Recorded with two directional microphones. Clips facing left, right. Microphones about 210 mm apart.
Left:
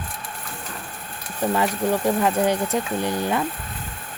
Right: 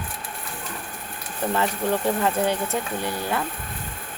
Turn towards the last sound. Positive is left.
turn(degrees=20)  # may be behind; listen again after turning